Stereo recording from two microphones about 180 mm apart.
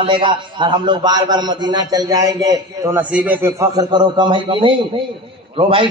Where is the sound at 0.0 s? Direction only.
25° right (ahead or behind).